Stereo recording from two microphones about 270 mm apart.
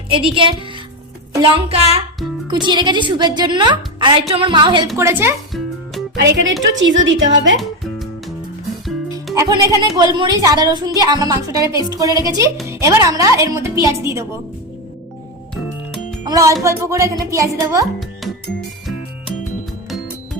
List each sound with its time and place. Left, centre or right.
0.1 s a woman's voice: centre
6.1 s a woman's voice: right
9.3 s a woman's voice: centre
16.2 s a woman's voice: centre